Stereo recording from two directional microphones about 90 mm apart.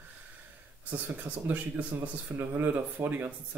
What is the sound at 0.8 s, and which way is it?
Speech, 15° right (ahead or behind).